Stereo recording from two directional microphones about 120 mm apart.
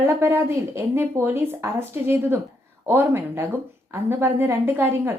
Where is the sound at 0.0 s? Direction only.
20° right (ahead or behind).